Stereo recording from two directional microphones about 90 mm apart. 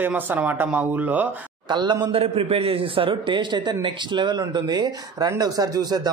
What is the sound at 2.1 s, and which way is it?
A man's voice, 90° right.